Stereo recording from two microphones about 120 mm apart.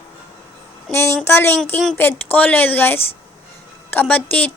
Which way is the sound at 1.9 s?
15° left (ahead or behind).